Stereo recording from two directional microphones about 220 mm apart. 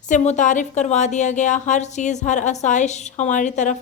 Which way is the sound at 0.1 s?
35° left (ahead or behind).